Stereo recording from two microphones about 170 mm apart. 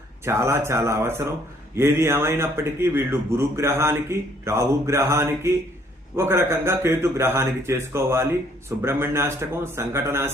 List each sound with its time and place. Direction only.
0.3 s a man's voice: 15° right (ahead or behind)